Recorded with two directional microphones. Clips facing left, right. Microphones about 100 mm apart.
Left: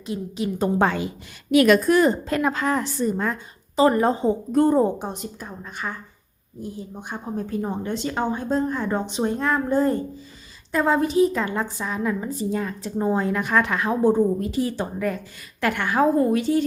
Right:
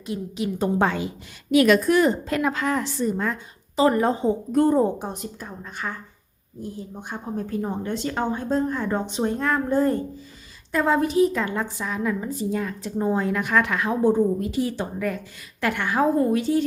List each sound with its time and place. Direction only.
0.1 s a woman's voice: 35° left (ahead or behind)
0.8 s a woman's voice: 55° left (ahead or behind); by 5.9 s 10° left (ahead or behind)
7.1 s a woman's voice: 15° left (ahead or behind); by 15.2 s 35° left (ahead or behind)
15.6 s a woman's voice: 55° left (ahead or behind)